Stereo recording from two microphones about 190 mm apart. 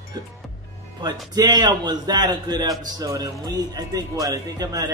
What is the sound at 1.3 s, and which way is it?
Speech, 20° right (ahead or behind).